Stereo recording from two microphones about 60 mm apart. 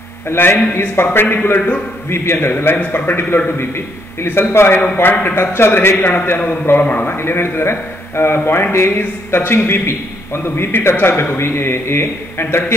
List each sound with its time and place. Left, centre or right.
0.3 s a man's voice: left
2.5 s a man's voice: left